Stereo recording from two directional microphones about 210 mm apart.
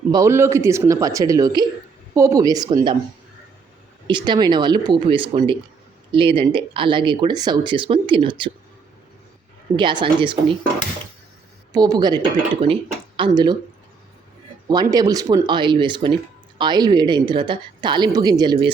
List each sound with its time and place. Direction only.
0.1 s speech: 15° right (ahead or behind)
4.0 s speech: 20° right (ahead or behind)
9.7 s speech: 20° right (ahead or behind)
14.7 s speech: 20° right (ahead or behind)